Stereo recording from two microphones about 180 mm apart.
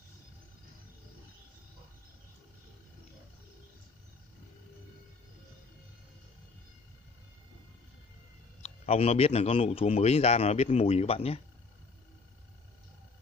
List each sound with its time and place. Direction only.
8.6 s speech: 35° left (ahead or behind)